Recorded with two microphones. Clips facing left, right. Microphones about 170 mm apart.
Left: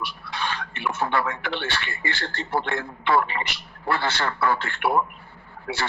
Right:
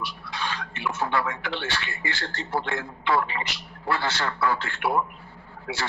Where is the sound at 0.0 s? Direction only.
60° left (ahead or behind).